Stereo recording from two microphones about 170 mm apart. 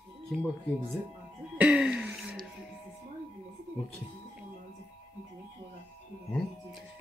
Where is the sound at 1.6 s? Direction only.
5° right (ahead or behind).